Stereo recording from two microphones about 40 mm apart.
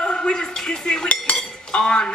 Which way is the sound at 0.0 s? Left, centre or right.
Left.